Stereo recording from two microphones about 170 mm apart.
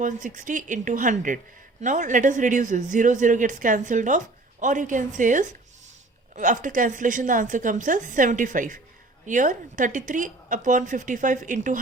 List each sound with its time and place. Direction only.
0.0 s speech: 50° right (ahead or behind)